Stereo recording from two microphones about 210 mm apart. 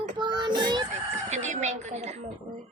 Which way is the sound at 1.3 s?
35° right (ahead or behind).